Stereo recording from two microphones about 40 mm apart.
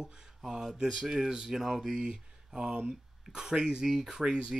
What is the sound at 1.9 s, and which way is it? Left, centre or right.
Speech, centre.